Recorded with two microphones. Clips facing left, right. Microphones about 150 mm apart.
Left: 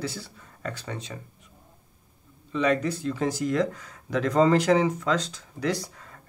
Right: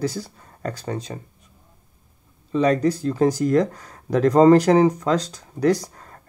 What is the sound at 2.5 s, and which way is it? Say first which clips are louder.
Speech: right 6 dB; 35° right (ahead or behind).